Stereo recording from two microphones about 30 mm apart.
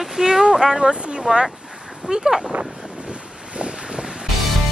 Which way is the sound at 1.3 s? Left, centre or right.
Right.